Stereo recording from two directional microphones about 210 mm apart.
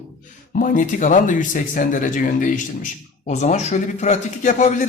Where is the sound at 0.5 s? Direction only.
40° left (ahead or behind).